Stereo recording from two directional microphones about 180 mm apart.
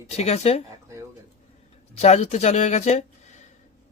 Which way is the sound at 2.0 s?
35° left (ahead or behind).